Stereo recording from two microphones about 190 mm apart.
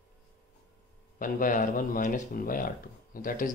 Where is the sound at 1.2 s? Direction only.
45° left (ahead or behind).